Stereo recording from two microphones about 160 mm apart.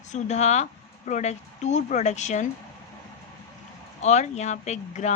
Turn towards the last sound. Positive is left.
turn(degrees=45)  # may be behind; listen again after turning